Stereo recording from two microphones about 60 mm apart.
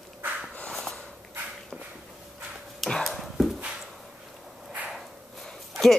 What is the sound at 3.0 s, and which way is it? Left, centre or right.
Dog, centre.